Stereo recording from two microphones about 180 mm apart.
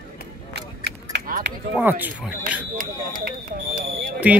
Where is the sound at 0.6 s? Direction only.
70° right (ahead or behind).